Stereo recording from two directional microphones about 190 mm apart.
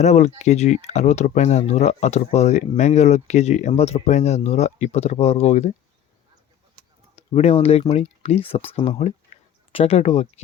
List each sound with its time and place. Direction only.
0.0 s speech: 35° left (ahead or behind)
7.2 s speech: 35° left (ahead or behind)